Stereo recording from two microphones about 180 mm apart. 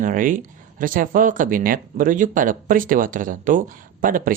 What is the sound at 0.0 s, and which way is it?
Speech, 45° right (ahead or behind).